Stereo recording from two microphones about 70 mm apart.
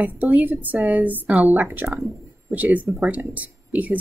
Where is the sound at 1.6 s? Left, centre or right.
Right.